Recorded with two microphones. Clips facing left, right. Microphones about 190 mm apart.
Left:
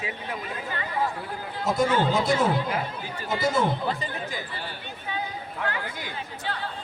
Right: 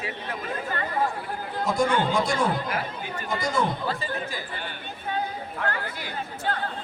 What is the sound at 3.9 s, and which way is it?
Speech, 20° left (ahead or behind).